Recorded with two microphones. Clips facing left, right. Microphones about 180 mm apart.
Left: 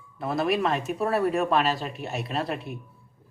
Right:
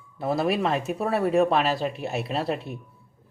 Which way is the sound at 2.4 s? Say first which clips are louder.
Right 3 dB; 30° right (ahead or behind).